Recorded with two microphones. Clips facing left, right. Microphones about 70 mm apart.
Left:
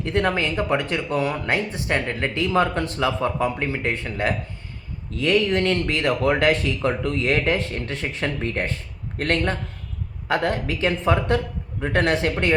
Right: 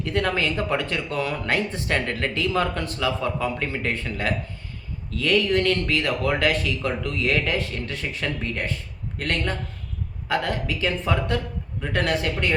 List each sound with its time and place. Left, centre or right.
0.0 s speech: left